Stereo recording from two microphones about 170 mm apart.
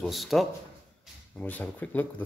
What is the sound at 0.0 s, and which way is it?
Speech, centre (ahead or behind).